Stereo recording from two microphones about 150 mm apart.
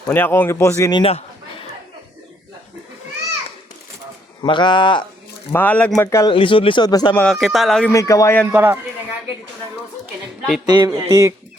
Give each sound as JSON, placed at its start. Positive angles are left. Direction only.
{"t": 0.1, "sound": "speech", "side_deg": 15}
{"t": 4.4, "sound": "speech", "side_deg": 30}
{"t": 5.5, "sound": "speech", "side_deg": 10}
{"t": 6.1, "sound": "speech", "side_deg": 20}
{"t": 6.3, "sound": "speech", "side_deg": 35}
{"t": 7.1, "sound": "speech", "side_deg": 5}
{"t": 7.9, "sound": "speech", "side_deg": 20}
{"t": 8.5, "sound": "a man's voice", "side_deg": -15}
{"t": 10.7, "sound": "speech", "side_deg": -25}